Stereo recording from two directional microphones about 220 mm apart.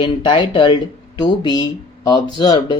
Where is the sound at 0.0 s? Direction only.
20° left (ahead or behind).